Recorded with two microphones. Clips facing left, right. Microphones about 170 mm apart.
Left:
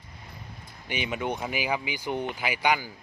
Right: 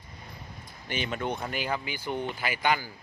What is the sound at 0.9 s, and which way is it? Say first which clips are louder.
Speech: left 1 dB; 10° left (ahead or behind).